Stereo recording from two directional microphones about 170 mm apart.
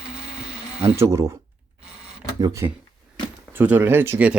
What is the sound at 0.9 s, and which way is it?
Speech, 15° right (ahead or behind).